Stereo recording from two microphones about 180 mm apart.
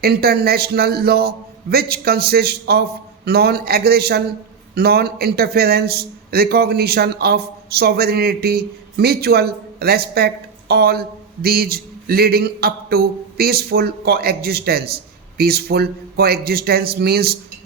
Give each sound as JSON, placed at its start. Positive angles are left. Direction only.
{"t": 0.0, "sound": "a man's voice", "side_deg": -60}